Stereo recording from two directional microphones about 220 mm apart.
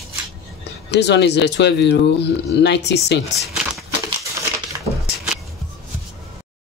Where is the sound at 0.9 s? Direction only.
50° left (ahead or behind).